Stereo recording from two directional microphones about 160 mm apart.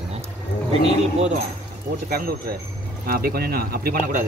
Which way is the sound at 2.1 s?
70° right (ahead or behind).